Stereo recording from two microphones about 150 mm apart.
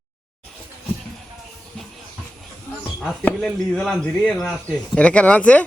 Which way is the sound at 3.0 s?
5° left (ahead or behind).